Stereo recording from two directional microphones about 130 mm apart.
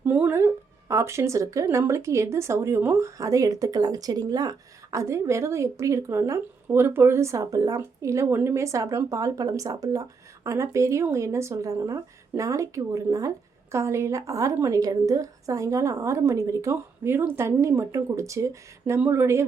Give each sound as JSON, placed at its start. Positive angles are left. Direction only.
{"t": 0.0, "sound": "speech", "side_deg": -15}